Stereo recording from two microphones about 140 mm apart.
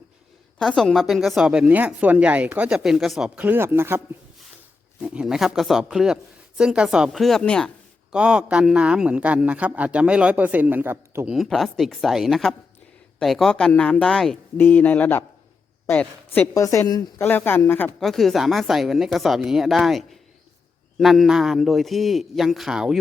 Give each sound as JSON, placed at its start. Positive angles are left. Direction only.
{"t": 0.6, "sound": "a woman's voice", "side_deg": 5}
{"t": 8.1, "sound": "speech", "side_deg": -5}
{"t": 11.3, "sound": "a woman's voice", "side_deg": 0}
{"t": 17.2, "sound": "speech", "side_deg": 15}
{"t": 18.0, "sound": "a woman's voice", "side_deg": 0}